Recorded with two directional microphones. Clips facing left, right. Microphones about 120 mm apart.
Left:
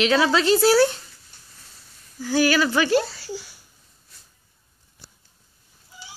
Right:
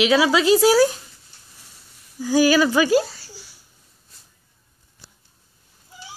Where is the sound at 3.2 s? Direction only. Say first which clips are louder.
Left 12 dB; 65° left (ahead or behind).